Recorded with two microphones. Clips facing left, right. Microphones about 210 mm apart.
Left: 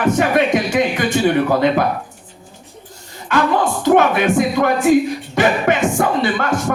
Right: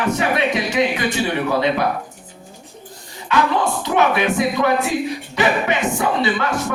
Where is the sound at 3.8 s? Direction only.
50° left (ahead or behind).